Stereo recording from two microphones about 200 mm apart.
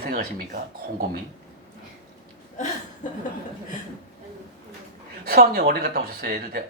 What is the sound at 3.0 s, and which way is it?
Chuckle, 40° left (ahead or behind).